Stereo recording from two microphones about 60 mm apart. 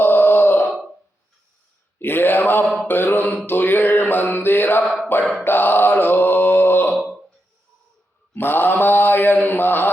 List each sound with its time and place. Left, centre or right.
0.0 s wail: left
2.0 s a sound: left
2.7 s mantra: left
5.2 s mantra: centre
5.5 s mantra: left
8.4 s mantra: left